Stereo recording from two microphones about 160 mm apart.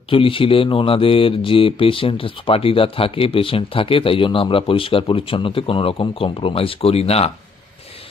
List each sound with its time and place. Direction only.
0.1 s speech: 35° left (ahead or behind)